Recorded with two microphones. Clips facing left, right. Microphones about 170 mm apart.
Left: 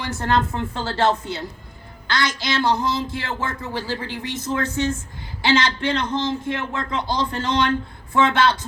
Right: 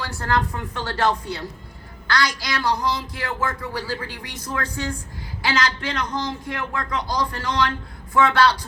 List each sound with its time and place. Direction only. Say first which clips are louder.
0.0 s speech: left 2 dB; 20° left (ahead or behind)